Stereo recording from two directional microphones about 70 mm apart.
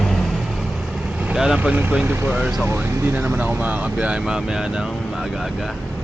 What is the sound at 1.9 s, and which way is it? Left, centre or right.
Speech, right.